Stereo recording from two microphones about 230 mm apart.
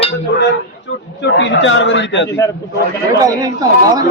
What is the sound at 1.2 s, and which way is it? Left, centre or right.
Speech, left.